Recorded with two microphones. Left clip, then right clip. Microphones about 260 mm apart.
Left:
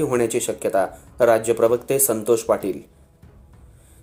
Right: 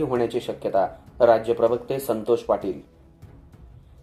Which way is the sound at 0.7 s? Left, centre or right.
Left.